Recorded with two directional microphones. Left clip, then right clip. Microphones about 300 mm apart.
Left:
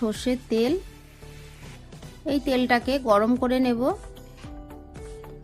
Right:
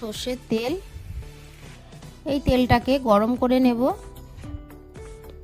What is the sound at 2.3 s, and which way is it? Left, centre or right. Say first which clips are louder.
Speech: right 2 dB; right.